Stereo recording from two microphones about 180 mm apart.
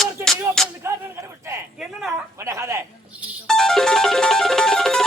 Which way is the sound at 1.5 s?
15° right (ahead or behind).